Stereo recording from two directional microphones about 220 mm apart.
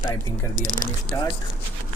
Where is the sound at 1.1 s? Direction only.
15° left (ahead or behind).